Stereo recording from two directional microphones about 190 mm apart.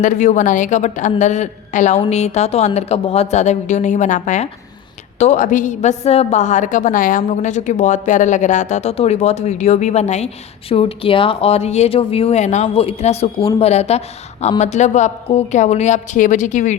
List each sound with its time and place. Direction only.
0.0 s a woman's voice: 40° left (ahead or behind)